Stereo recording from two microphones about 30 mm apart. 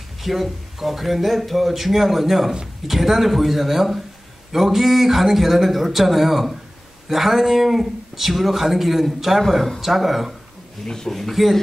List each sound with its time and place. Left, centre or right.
0.2 s a man's voice: centre
10.9 s speech: centre
11.1 s speech: centre